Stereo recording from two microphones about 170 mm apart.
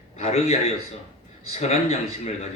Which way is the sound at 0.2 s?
40° left (ahead or behind).